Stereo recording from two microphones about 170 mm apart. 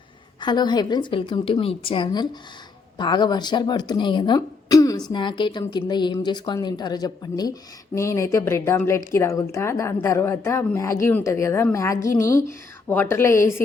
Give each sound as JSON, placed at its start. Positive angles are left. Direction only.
{"t": 0.3, "sound": "a woman's voice", "side_deg": 25}